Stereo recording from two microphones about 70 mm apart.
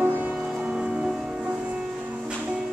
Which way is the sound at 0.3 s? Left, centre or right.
Centre.